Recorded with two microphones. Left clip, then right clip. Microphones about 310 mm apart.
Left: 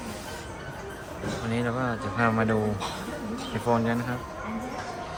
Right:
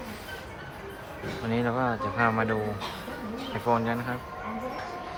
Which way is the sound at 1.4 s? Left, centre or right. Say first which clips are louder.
Right 2 dB; centre.